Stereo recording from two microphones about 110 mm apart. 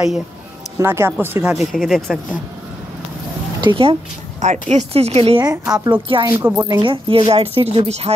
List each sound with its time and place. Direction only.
0.7 s speech: 25° right (ahead or behind)
1.6 s speech: centre (ahead or behind)
3.6 s speech: 55° right (ahead or behind)
4.4 s speech: 90° right; by 5.4 s 65° right (ahead or behind)
5.9 s speech: 50° right (ahead or behind)
6.2 s speech: 20° right (ahead or behind)
6.7 s a woman's voice: 50° right (ahead or behind)